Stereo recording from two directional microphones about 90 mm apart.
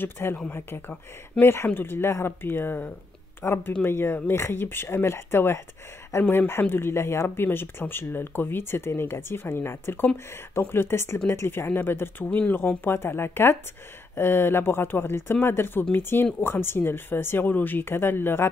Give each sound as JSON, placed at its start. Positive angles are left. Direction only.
{"t": 0.0, "sound": "speech", "side_deg": 25}